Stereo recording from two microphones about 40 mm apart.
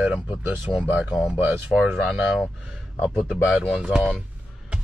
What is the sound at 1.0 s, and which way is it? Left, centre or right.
Speech, right.